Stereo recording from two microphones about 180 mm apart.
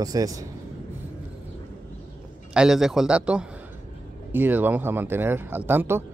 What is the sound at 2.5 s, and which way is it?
Speech, 5° right (ahead or behind).